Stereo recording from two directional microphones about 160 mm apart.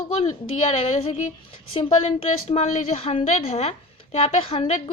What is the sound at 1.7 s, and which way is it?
A woman's voice, 40° left (ahead or behind).